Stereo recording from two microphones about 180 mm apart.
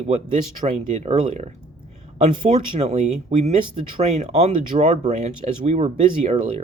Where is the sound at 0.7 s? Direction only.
40° right (ahead or behind).